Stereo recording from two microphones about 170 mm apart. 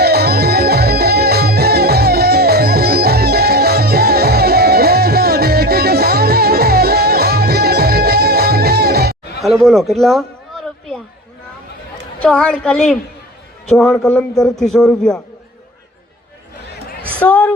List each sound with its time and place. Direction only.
0.0 s music: 70° right (ahead or behind)
9.4 s speech: centre (ahead or behind)
12.2 s a woman's voice: 5° left (ahead or behind)
17.2 s speech: 10° left (ahead or behind)